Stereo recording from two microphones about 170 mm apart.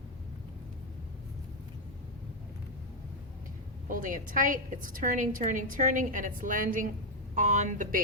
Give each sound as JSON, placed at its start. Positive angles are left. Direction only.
{"t": 3.8, "sound": "a woman's voice", "side_deg": -50}